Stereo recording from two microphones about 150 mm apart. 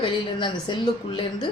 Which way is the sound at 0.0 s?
30° left (ahead or behind).